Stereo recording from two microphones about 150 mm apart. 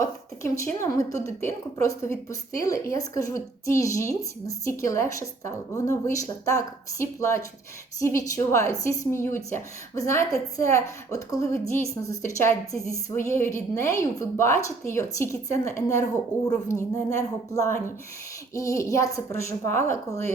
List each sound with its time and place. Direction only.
0.0 s a woman's voice: 20° left (ahead or behind)